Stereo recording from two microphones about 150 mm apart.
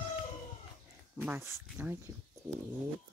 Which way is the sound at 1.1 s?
15° right (ahead or behind).